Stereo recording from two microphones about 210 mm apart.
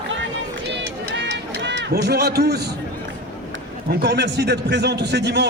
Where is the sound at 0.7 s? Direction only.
55° right (ahead or behind).